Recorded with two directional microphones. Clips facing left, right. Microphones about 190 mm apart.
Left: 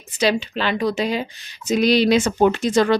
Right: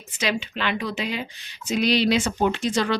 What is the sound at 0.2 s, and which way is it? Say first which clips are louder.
A woman's voice: left 6 dB; 35° left (ahead or behind).